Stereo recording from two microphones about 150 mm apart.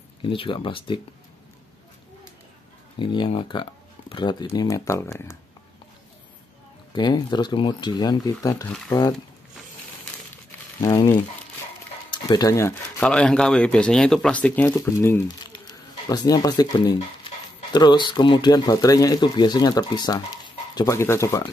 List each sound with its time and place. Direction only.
0.2 s speech: 35° left (ahead or behind)
3.0 s speech: 35° left (ahead or behind)
6.9 s speech: 30° left (ahead or behind)
10.8 s speech: 25° left (ahead or behind)
13.0 s speech: 5° left (ahead or behind)
14.7 s speech: 20° left (ahead or behind)